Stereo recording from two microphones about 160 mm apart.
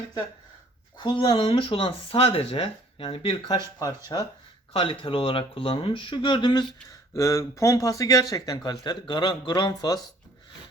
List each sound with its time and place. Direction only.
0.9 s speech: 30° left (ahead or behind)
4.7 s speech: 35° left (ahead or behind)